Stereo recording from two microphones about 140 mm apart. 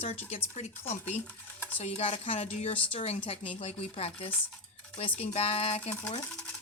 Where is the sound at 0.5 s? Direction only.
50° left (ahead or behind).